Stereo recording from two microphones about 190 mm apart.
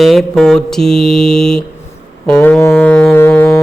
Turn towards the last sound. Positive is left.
turn(degrees=10)  # may be behind; listen again after turning